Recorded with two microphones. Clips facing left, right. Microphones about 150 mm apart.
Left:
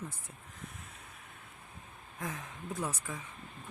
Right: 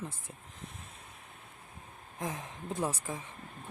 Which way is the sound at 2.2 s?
20° right (ahead or behind).